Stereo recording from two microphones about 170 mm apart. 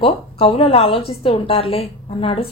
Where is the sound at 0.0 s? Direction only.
35° left (ahead or behind).